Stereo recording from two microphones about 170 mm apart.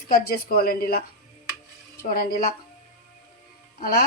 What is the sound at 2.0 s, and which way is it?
Speech, 55° left (ahead or behind).